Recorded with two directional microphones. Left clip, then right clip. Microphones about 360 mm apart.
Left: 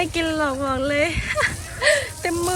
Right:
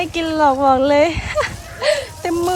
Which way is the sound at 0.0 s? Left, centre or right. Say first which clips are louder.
Right 6 dB; centre.